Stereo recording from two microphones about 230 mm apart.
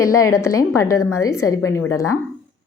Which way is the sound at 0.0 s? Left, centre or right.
Centre.